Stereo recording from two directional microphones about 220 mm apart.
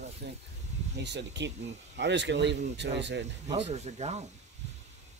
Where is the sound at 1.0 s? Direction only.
50° right (ahead or behind).